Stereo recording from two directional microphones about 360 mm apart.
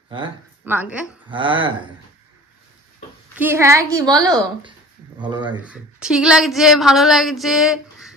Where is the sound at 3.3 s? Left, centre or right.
Centre.